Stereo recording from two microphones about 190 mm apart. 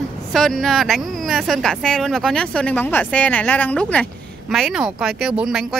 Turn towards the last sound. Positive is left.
turn(degrees=0)  # may be behind; listen again after turning